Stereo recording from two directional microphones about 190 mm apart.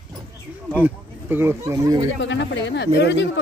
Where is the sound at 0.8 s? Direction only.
10° right (ahead or behind).